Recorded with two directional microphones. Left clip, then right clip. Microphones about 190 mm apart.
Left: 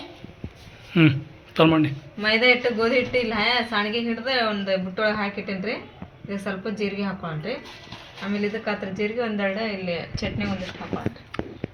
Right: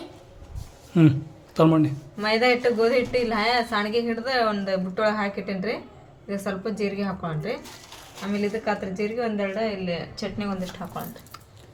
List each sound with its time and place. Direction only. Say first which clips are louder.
0.9 s speech: left 1 dB; 15° right (ahead or behind); by 10.2 s 5° left (ahead or behind)